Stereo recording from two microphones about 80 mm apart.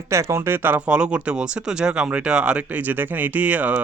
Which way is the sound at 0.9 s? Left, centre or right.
Centre.